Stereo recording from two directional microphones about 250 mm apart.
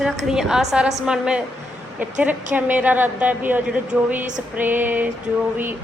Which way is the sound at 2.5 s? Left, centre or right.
Centre.